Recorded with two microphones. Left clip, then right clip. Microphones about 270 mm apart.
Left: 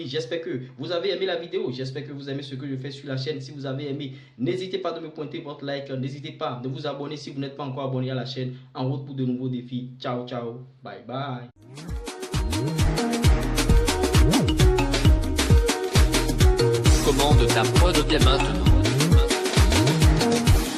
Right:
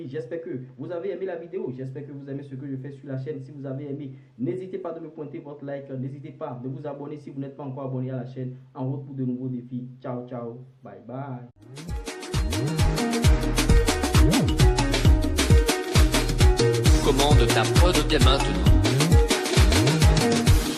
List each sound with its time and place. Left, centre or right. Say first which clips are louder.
0.0 s speech: left 4 dB; centre
10.0 s speech: left 4 dB; centre
12.0 s music: left 1 dB; centre